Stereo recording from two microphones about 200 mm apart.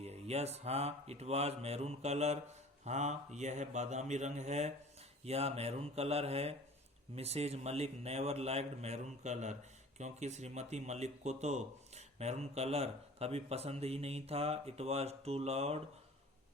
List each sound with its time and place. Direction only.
0.0 s a man's voice: 30° right (ahead or behind)